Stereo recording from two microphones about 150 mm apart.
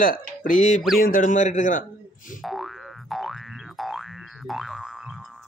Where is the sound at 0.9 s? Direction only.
70° left (ahead or behind).